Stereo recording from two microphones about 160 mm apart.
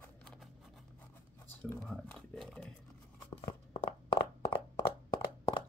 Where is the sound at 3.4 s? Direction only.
30° left (ahead or behind).